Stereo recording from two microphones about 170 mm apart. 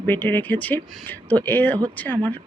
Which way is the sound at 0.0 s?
10° left (ahead or behind).